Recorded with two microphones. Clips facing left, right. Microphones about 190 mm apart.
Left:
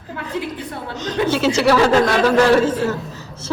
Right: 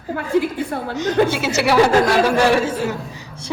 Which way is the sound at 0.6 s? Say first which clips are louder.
Right 5 dB; 50° right (ahead or behind).